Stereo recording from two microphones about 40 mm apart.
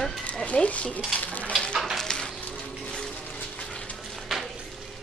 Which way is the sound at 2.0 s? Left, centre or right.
Centre.